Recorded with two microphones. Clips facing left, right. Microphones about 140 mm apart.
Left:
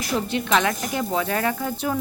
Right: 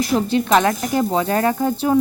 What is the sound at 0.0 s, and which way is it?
Stir, 35° right (ahead or behind).